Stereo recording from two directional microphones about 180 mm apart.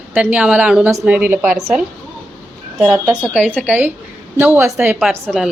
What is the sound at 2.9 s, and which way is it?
A woman's voice, 5° right (ahead or behind).